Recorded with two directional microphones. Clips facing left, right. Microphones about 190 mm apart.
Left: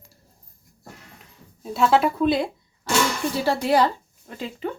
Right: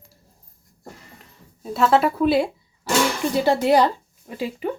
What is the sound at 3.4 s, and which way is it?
A woman's voice, 15° right (ahead or behind).